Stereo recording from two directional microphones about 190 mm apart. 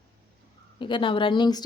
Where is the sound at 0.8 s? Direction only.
25° left (ahead or behind).